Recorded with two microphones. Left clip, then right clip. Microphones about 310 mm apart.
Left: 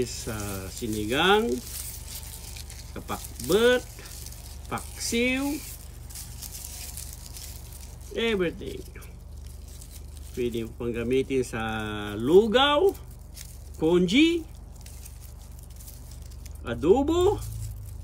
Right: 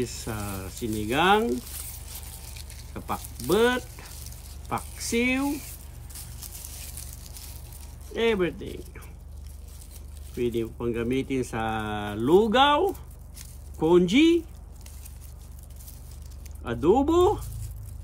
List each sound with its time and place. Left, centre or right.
0.0 s speech: centre
2.5 s a sound: centre
8.2 s speech: centre
10.3 s speech: centre
13.4 s a sound: centre
16.6 s speech: centre